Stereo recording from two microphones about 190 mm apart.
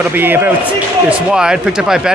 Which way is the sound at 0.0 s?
10° right (ahead or behind).